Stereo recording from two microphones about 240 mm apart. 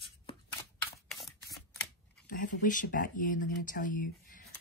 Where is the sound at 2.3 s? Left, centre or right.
Left.